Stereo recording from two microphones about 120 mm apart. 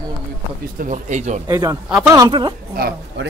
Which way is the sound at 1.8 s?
10° right (ahead or behind).